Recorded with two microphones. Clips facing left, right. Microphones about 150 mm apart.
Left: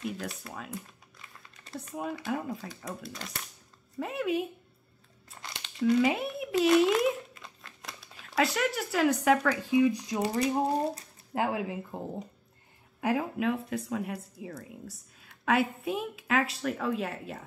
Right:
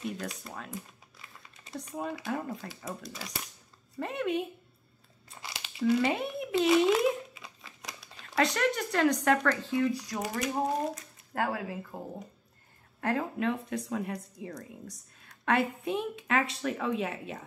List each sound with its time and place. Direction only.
0.0 s speech: centre (ahead or behind); by 10.5 s 25° left (ahead or behind)
10.7 s a sound: 30° left (ahead or behind)
11.3 s speech: 20° left (ahead or behind)
13.0 s speech: 10° left (ahead or behind)